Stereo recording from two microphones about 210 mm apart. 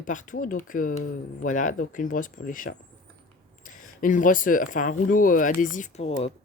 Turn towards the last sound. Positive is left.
turn(degrees=30)  # may be behind; listen again after turning